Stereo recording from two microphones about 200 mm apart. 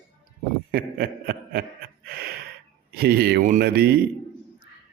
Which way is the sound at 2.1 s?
50° right (ahead or behind).